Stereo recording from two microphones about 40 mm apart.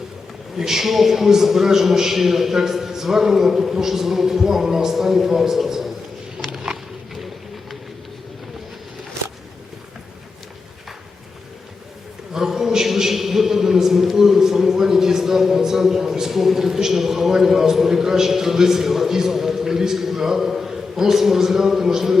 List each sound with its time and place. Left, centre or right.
0.5 s a man's voice: centre
6.4 s a sound: centre
12.3 s a man's voice: centre